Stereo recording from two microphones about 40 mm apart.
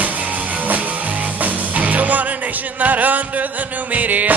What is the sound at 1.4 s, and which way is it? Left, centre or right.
Music, right.